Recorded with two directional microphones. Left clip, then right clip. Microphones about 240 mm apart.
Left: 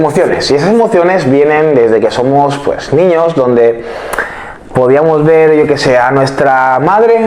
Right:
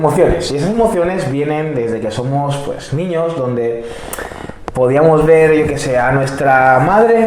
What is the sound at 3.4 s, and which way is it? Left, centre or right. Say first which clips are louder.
Speech: left 9 dB; left.